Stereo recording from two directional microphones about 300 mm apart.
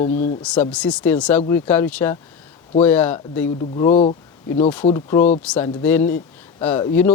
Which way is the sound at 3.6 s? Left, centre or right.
Centre.